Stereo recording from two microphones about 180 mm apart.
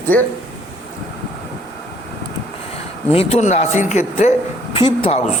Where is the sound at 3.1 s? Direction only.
35° left (ahead or behind).